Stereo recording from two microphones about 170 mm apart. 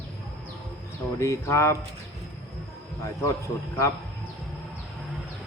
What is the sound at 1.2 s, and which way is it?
Speech, 15° left (ahead or behind).